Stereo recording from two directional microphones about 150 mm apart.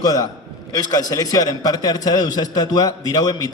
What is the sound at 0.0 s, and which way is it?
A man's voice, 25° left (ahead or behind).